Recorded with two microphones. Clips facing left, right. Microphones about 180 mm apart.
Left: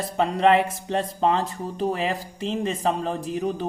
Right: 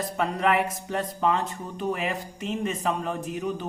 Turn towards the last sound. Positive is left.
turn(degrees=35)  # may be behind; listen again after turning